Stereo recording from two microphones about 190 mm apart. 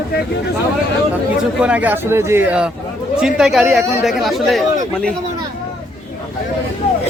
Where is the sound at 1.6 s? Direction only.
5° right (ahead or behind).